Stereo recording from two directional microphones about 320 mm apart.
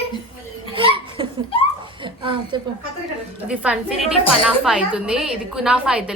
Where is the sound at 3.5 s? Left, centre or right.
Centre.